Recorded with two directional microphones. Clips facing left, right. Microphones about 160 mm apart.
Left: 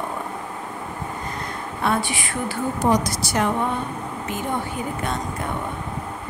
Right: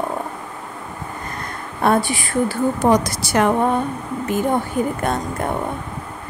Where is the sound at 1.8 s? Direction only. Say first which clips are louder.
Right 6 dB; 45° right (ahead or behind).